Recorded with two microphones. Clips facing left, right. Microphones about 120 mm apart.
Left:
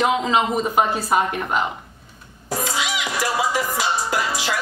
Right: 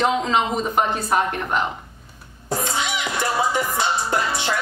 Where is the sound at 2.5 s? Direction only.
30° right (ahead or behind).